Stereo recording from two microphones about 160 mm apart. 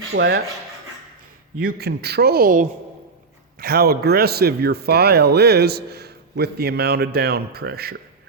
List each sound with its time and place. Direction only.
0.1 s speech: 90° right
1.6 s speech: 90° right; by 2.6 s 60° right (ahead or behind)
3.6 s speech: 75° right (ahead or behind)